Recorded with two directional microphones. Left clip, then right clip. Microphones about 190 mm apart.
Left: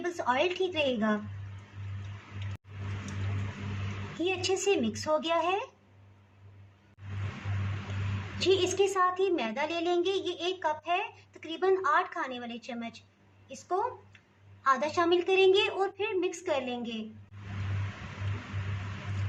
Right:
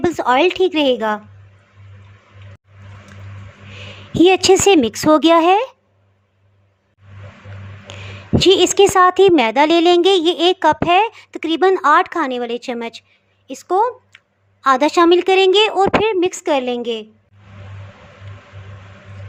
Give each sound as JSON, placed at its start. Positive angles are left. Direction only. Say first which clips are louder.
{"t": 0.0, "sound": "a woman's voice", "louder": "right 14 dB", "side_deg": -55}
{"t": 4.2, "sound": "a woman's voice", "louder": "right 19 dB", "side_deg": -60}
{"t": 8.4, "sound": "a woman's voice", "louder": "right 15 dB", "side_deg": -55}